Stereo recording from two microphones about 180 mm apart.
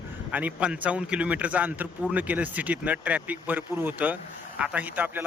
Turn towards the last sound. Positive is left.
turn(degrees=-10)  # may be behind; listen again after turning